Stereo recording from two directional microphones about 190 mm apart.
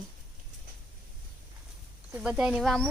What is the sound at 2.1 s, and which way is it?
Speech, 5° right (ahead or behind).